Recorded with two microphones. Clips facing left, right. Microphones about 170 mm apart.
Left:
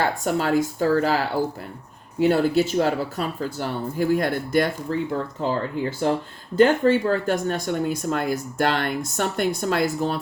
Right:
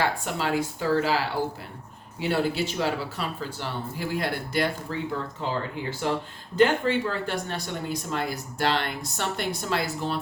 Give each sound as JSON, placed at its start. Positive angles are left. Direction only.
{"t": 0.3, "sound": "speech", "side_deg": 45}